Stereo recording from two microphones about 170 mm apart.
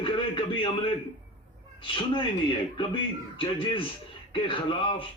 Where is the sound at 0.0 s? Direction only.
30° left (ahead or behind).